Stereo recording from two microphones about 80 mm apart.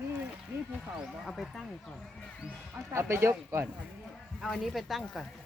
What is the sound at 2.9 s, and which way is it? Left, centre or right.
Speech, right.